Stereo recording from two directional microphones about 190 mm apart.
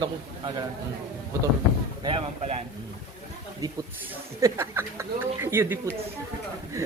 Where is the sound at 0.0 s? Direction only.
25° right (ahead or behind).